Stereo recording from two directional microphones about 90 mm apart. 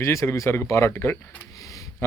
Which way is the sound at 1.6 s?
40° left (ahead or behind).